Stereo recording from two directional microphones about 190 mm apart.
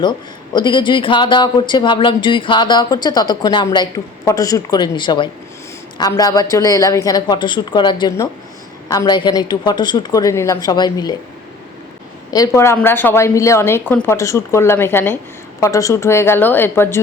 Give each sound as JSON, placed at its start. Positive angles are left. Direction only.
{"t": 0.5, "sound": "speech", "side_deg": 25}
{"t": 12.3, "sound": "a woman's voice", "side_deg": 15}